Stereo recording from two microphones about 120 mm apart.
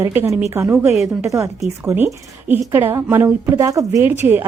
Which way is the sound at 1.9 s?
15° right (ahead or behind).